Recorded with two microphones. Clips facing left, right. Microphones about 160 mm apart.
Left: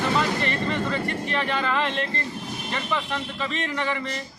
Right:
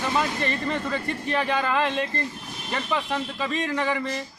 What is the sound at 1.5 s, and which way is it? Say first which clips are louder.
A man's voice: right 2 dB; 15° right (ahead or behind).